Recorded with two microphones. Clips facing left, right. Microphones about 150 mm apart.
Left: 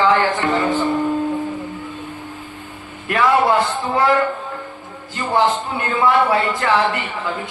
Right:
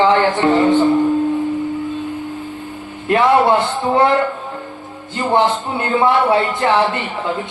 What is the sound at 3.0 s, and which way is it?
A man's voice, 25° right (ahead or behind).